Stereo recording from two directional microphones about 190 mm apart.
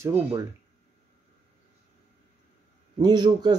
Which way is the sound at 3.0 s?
20° right (ahead or behind).